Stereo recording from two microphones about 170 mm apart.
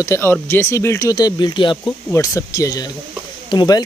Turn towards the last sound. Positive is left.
turn(degrees=25)  # may be behind; listen again after turning